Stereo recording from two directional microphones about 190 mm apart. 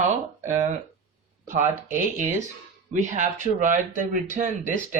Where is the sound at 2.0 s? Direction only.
40° right (ahead or behind).